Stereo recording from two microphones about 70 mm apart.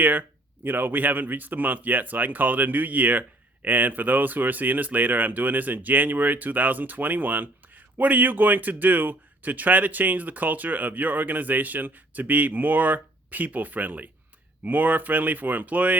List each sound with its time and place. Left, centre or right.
0.0 s speech: right